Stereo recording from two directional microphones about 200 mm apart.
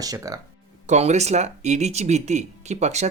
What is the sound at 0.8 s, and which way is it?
Speech, 35° right (ahead or behind).